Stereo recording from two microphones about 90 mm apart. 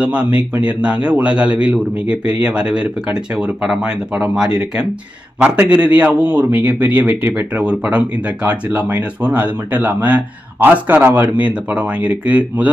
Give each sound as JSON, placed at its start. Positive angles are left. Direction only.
{"t": 0.0, "sound": "speech", "side_deg": -15}